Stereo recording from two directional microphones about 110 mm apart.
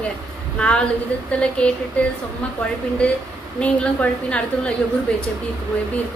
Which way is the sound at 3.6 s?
10° left (ahead or behind).